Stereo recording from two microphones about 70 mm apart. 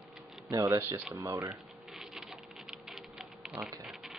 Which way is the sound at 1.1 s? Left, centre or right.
Right.